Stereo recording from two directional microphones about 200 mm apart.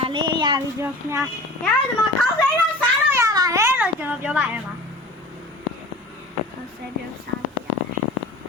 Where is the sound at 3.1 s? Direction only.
15° right (ahead or behind).